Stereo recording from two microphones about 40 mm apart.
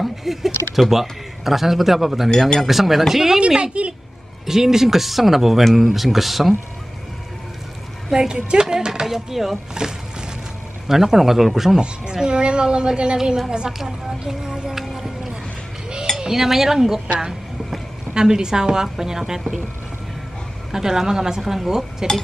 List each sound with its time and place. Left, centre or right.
0.0 s a sound: centre
0.7 s a man's voice: centre
3.3 s a woman's voice: right
4.5 s a woman's voice: centre
8.1 s a woman's voice: centre
8.5 s a sound: centre
9.0 s a man's voice: centre
10.9 s a woman's voice: centre
11.8 s a woman's voice: right
18.1 s a woman's voice: centre
20.7 s a woman's voice: centre